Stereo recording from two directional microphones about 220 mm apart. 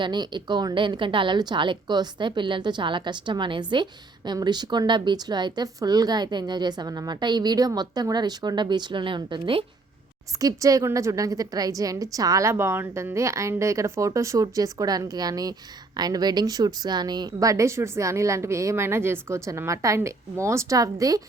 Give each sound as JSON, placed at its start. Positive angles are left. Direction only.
{"t": 0.0, "sound": "a woman's voice", "side_deg": -20}